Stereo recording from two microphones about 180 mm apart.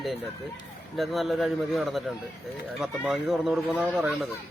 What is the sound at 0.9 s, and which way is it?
Speech, centre (ahead or behind).